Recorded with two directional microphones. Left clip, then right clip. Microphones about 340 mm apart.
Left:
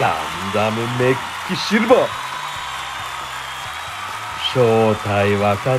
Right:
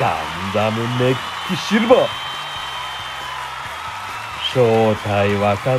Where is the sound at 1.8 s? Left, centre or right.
Left.